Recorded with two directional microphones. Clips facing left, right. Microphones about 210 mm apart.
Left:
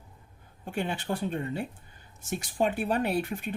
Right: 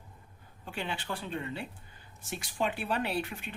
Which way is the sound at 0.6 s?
50° left (ahead or behind).